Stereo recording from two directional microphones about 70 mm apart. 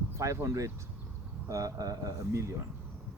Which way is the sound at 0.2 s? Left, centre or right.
Right.